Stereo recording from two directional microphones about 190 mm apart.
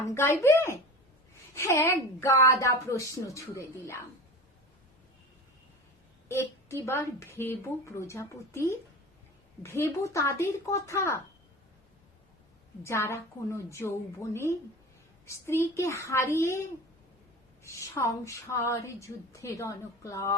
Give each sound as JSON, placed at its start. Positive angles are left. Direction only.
{"t": 0.1, "sound": "a woman's voice", "side_deg": 15}
{"t": 6.2, "sound": "a woman's voice", "side_deg": 15}
{"t": 12.8, "sound": "a woman's voice", "side_deg": 15}